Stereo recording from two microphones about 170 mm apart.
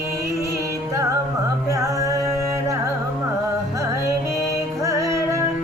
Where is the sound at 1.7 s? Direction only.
20° right (ahead or behind).